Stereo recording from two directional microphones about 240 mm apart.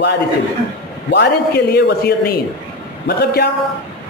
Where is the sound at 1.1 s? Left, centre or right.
Left.